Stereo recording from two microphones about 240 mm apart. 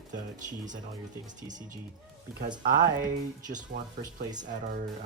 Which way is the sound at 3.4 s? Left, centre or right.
Right.